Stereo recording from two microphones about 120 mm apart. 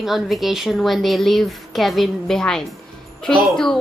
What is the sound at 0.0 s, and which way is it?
Speech, centre (ahead or behind).